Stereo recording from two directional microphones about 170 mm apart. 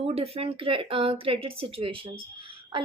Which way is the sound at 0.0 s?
35° right (ahead or behind).